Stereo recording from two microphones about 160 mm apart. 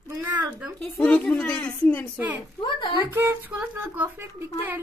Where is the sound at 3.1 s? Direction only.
15° right (ahead or behind).